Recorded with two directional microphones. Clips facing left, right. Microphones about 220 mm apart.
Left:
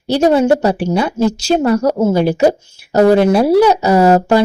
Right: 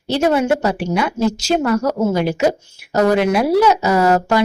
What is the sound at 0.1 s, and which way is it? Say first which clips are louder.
Speech: left 5 dB; 35° left (ahead or behind).